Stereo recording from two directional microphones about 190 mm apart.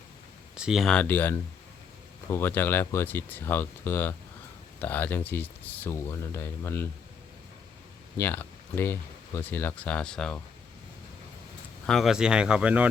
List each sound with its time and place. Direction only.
0.5 s speech: 5° right (ahead or behind); by 6.8 s 10° left (ahead or behind)
8.2 s speech: 10° left (ahead or behind)
11.9 s speech: centre (ahead or behind)